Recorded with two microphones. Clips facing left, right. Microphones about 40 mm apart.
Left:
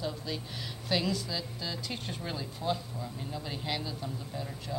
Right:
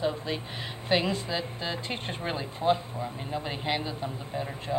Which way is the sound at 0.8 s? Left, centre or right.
Right.